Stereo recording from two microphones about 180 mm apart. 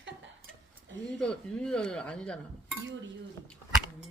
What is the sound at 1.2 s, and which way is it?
Speech, 5° left (ahead or behind).